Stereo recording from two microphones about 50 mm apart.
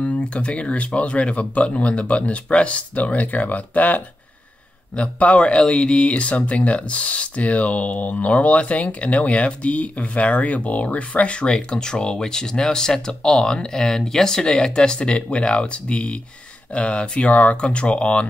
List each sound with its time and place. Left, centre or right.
0.0 s speech: left